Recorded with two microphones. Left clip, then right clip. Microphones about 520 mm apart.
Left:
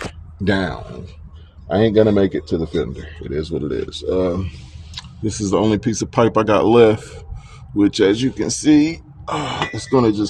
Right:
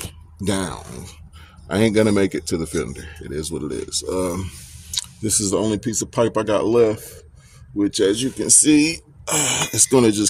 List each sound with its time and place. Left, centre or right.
0.4 s speech: right
6.3 s speech: right